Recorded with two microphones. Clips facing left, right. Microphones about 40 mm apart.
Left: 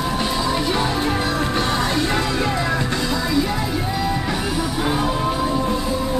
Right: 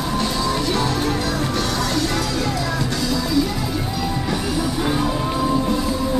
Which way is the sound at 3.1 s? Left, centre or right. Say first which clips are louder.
Right 1 dB; centre.